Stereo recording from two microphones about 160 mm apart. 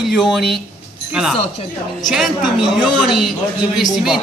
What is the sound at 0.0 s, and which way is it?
Speech, centre (ahead or behind).